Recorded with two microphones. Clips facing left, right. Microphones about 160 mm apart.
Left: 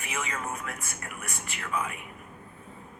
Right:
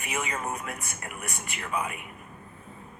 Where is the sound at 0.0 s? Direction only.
20° right (ahead or behind).